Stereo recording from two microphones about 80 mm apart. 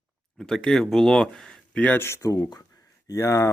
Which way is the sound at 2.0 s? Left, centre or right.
Left.